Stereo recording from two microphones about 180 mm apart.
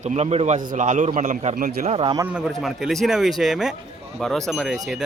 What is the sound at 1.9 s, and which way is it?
Speech, 25° right (ahead or behind).